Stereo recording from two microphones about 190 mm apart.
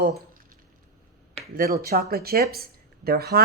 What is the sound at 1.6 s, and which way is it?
Speech, 55° right (ahead or behind).